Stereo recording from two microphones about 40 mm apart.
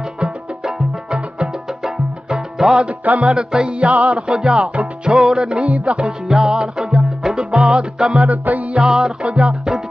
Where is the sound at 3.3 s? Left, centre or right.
Right.